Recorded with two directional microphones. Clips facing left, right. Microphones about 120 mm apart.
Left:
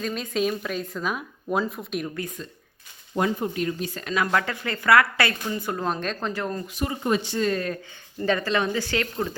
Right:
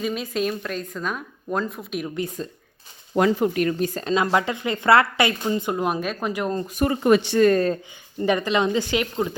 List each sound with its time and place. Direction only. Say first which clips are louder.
0.0 s speech: right 1 dB; 5° right (ahead or behind)
3.2 s speech: right 5 dB; 90° right; by 3.8 s 65° right (ahead or behind)
3.8 s speech: right 7 dB; 45° right (ahead or behind)
4.0 s speech: right 2 dB; 25° right (ahead or behind)
6.7 s speech: right 8 dB; 65° right (ahead or behind)
8.2 s speech: right 3 dB; 15° right (ahead or behind)